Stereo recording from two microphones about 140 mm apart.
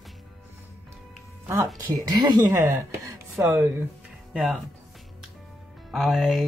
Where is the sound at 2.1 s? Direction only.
30° right (ahead or behind).